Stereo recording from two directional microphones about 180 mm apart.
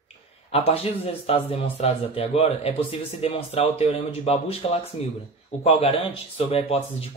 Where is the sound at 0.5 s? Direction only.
35° left (ahead or behind).